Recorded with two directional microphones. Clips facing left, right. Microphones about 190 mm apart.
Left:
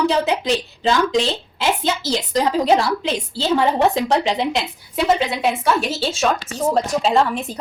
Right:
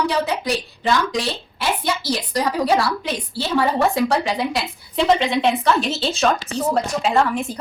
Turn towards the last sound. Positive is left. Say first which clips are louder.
# left 2 dB
turn(degrees=25)  # may be behind; listen again after turning